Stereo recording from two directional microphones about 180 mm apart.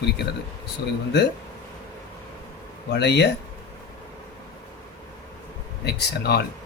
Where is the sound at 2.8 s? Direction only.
70° left (ahead or behind).